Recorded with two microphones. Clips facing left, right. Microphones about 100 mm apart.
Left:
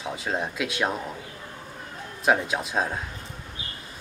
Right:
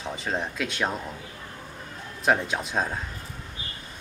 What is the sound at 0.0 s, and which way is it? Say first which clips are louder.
Speech: left 1 dB; 5° left (ahead or behind).